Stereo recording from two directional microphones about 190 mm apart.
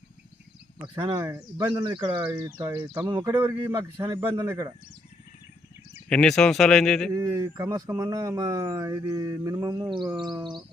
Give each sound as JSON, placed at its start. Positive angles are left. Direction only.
{"t": 0.9, "sound": "speech", "side_deg": -15}
{"t": 2.1, "sound": "speech", "side_deg": -10}
{"t": 6.1, "sound": "speech", "side_deg": 5}
{"t": 7.1, "sound": "speech", "side_deg": -20}